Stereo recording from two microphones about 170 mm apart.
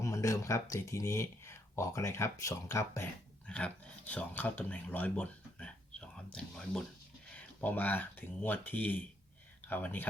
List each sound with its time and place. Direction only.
0.0 s speech: 20° left (ahead or behind)